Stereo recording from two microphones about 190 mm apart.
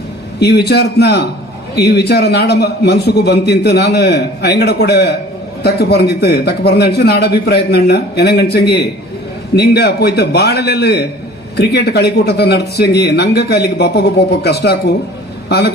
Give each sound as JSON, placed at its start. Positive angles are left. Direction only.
{"t": 0.3, "sound": "a man's voice", "side_deg": 60}